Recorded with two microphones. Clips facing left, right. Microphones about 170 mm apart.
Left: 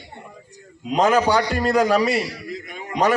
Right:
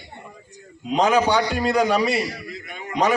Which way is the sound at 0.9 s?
Centre (ahead or behind).